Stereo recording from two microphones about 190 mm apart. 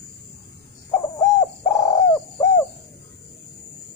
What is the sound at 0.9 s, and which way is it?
Bird, 15° left (ahead or behind).